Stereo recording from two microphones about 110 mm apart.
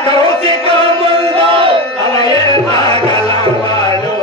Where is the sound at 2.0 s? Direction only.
40° left (ahead or behind).